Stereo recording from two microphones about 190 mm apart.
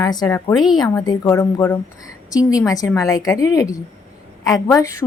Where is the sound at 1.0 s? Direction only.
15° left (ahead or behind).